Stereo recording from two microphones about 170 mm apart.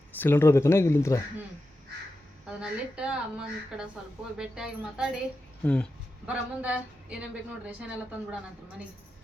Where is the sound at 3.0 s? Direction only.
5° right (ahead or behind).